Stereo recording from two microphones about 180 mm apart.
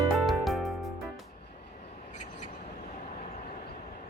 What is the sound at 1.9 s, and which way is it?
Vehicle, 40° left (ahead or behind).